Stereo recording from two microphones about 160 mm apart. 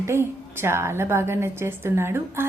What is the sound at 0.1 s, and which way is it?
A woman's voice, 15° right (ahead or behind).